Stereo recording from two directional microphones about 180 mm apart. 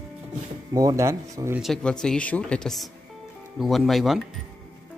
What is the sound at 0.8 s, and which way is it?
Speech, 15° right (ahead or behind).